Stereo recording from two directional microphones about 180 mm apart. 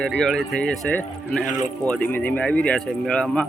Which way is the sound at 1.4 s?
45° left (ahead or behind).